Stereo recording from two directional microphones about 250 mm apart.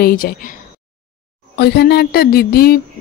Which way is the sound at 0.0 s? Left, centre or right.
Left.